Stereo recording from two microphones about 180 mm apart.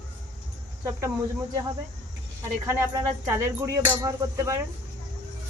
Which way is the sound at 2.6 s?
20° right (ahead or behind).